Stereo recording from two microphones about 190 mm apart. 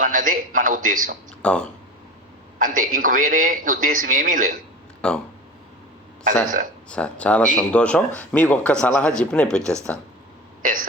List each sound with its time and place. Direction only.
0.0 s a man's voice: 45° right (ahead or behind)
1.4 s speech: 5° left (ahead or behind)
2.6 s a man's voice: 45° right (ahead or behind)
5.0 s a sound: 5° left (ahead or behind)
6.2 s a man's voice: 45° right (ahead or behind)
6.9 s speech: 5° left (ahead or behind)